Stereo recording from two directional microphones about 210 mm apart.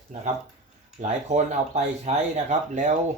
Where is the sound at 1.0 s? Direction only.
30° right (ahead or behind).